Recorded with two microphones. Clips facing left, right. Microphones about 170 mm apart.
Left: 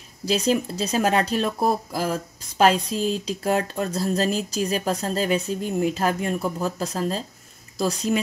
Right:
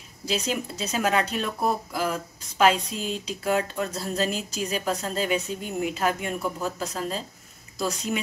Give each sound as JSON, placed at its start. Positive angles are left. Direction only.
{"t": 0.3, "sound": "speech", "side_deg": 35}